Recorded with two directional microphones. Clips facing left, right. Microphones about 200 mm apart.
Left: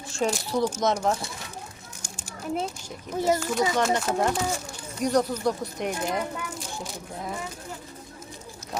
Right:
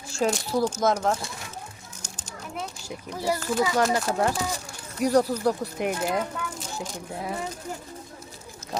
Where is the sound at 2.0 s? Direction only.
10° left (ahead or behind).